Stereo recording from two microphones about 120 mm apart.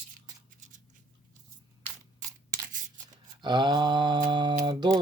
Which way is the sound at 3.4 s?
40° right (ahead or behind).